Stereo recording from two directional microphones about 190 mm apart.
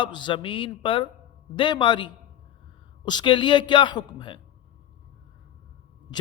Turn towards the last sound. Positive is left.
turn(degrees=20)  # may be behind; listen again after turning